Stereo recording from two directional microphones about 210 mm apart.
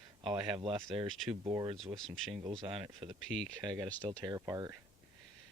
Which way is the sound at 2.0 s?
Centre (ahead or behind).